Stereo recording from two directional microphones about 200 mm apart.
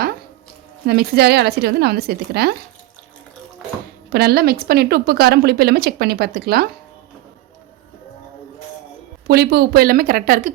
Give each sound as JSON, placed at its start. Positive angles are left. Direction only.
{"t": 0.9, "sound": "a woman's voice", "side_deg": -50}
{"t": 4.1, "sound": "a woman's voice", "side_deg": -50}
{"t": 9.2, "sound": "a woman's voice", "side_deg": -50}